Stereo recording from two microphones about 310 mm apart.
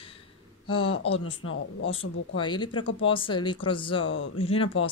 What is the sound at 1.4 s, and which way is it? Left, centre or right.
Speech, left.